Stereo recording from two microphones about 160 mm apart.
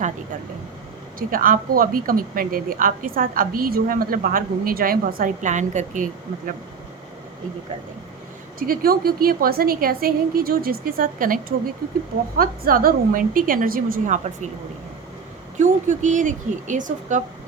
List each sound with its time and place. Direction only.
1.3 s a woman's voice: 60° right (ahead or behind)
8.5 s a woman's voice: 65° right (ahead or behind)
15.5 s speech: 50° right (ahead or behind)